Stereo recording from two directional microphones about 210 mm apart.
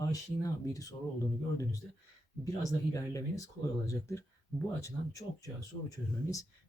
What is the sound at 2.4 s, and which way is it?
Speech, 15° left (ahead or behind).